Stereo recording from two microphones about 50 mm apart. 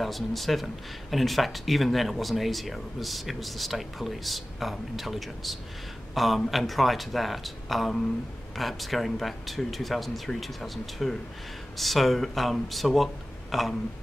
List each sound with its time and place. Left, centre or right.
0.0 s speech: centre